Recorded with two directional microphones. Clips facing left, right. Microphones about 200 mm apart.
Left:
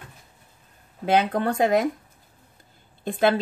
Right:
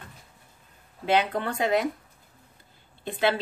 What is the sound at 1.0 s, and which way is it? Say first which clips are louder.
Speech: left 3 dB; 45° left (ahead or behind).